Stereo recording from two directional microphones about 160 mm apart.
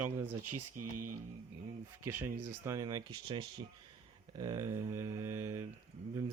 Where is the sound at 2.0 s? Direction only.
15° right (ahead or behind).